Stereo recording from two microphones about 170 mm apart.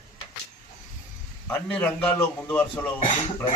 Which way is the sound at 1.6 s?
5° left (ahead or behind).